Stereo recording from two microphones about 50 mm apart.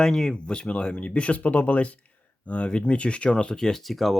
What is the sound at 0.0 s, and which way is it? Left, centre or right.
Speech, centre.